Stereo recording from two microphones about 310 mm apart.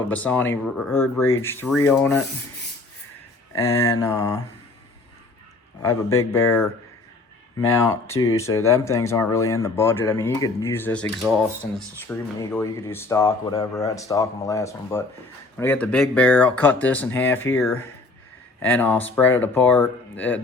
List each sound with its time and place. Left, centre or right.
0.1 s speech: centre
3.5 s speech: centre
6.1 s speech: centre
7.7 s speech: centre